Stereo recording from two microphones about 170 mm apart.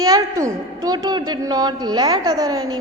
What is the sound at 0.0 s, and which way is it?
A woman's voice, 20° right (ahead or behind).